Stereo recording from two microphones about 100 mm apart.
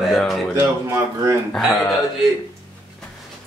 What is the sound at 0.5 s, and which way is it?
Speech, 30° right (ahead or behind).